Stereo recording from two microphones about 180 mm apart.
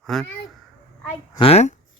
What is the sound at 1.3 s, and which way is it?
Speech, 30° left (ahead or behind).